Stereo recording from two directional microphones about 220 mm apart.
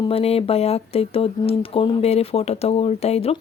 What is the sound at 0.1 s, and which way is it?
Speech, 25° left (ahead or behind).